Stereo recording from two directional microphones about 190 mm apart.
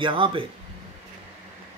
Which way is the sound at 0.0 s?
25° right (ahead or behind).